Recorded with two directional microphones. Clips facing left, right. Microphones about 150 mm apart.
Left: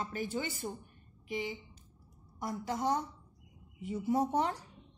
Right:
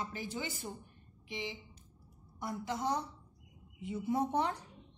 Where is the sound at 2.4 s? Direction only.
50° left (ahead or behind).